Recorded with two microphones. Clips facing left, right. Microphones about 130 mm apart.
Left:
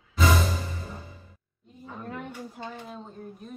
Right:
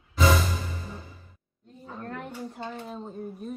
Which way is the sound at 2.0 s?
5° left (ahead or behind).